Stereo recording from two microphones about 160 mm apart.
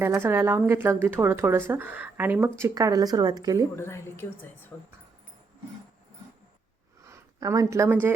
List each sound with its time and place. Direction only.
0.2 s speech: 15° right (ahead or behind)
3.8 s a woman's voice: 15° left (ahead or behind)
7.0 s a sound: 20° right (ahead or behind)